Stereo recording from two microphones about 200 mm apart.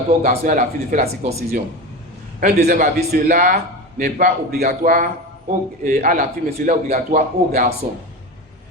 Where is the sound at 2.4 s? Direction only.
45° right (ahead or behind).